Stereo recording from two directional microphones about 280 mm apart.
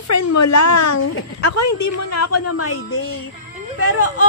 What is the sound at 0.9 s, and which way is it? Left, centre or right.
A woman's voice, left.